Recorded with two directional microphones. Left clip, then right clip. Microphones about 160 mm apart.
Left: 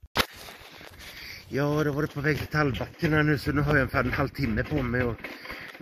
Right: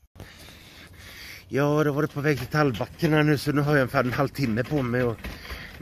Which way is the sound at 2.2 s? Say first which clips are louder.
Right 2 dB; 40° right (ahead or behind).